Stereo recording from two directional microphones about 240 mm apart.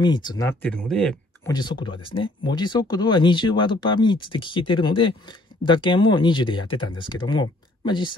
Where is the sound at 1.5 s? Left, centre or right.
Centre.